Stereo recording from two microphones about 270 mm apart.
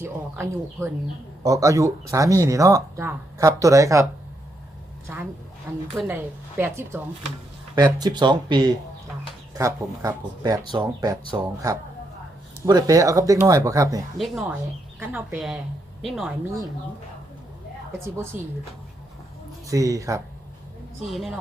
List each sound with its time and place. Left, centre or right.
0.0 s speech: centre
5.0 s speech: centre
14.2 s speech: centre
18.0 s speech: centre
19.6 s speech: centre
21.1 s speech: centre